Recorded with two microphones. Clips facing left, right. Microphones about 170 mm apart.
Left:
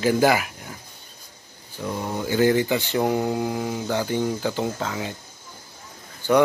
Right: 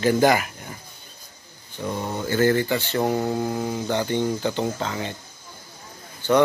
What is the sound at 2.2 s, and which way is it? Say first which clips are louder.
Speech: left 1 dB; 15° left (ahead or behind).